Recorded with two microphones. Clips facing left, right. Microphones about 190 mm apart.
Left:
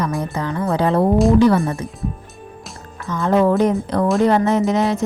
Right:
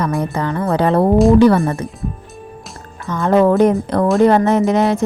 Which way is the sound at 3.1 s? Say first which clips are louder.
Right 3 dB; 55° right (ahead or behind).